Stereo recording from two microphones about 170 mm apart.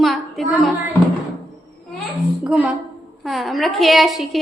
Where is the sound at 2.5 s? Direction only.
5° right (ahead or behind).